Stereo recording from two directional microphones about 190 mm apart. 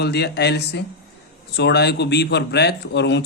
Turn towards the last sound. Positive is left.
turn(degrees=65)  # may be behind; listen again after turning